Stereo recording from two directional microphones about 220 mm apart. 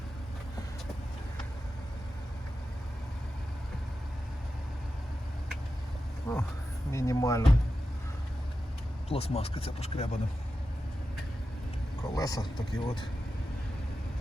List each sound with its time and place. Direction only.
6.3 s speech: 15° left (ahead or behind)
9.0 s speech: 25° left (ahead or behind)
12.0 s speech: 15° left (ahead or behind)